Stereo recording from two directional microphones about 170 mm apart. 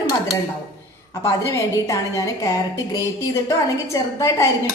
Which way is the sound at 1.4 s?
15° left (ahead or behind).